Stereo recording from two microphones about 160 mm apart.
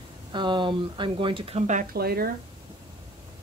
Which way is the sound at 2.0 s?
70° right (ahead or behind).